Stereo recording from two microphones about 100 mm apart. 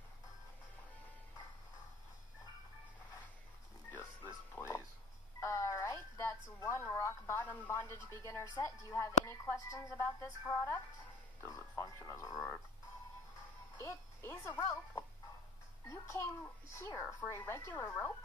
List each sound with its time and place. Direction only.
3.9 s music: 20° left (ahead or behind)
4.6 s a sound: 25° left (ahead or behind)
8.5 s speech: 35° left (ahead or behind)
13.7 s a child's voice: 30° left (ahead or behind)